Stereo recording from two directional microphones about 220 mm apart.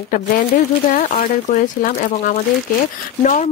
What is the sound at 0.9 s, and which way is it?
Speech, 40° left (ahead or behind).